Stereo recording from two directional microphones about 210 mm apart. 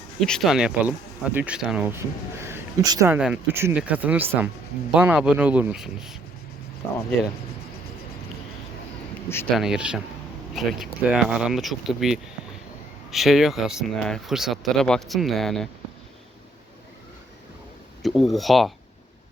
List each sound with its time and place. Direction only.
0.2 s speech: centre (ahead or behind); by 3.2 s 15° right (ahead or behind)
3.2 s speech: 5° right (ahead or behind)
9.6 s speech: 5° right (ahead or behind)
18.0 s speech: centre (ahead or behind)